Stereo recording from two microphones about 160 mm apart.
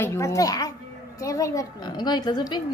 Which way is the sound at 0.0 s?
15° left (ahead or behind).